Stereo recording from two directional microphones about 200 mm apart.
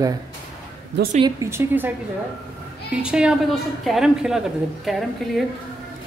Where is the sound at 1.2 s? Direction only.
15° right (ahead or behind).